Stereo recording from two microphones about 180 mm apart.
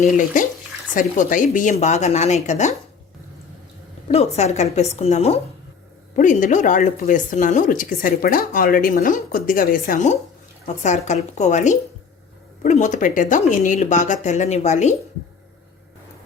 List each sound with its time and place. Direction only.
0.0 s a woman's voice: 45° left (ahead or behind)
4.1 s a woman's voice: 35° left (ahead or behind)